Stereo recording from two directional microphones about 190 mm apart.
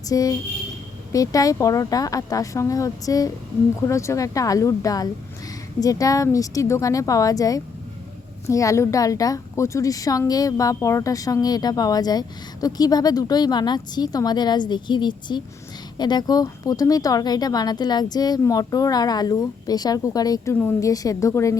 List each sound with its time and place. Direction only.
0.1 s a woman's voice: 20° left (ahead or behind)